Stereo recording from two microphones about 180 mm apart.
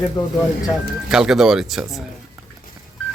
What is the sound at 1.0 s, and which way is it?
Speech, 5° right (ahead or behind).